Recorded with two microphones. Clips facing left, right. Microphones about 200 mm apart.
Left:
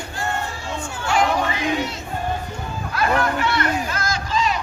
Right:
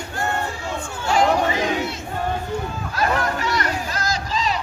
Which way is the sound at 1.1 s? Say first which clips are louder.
Right 2 dB; 35° right (ahead or behind).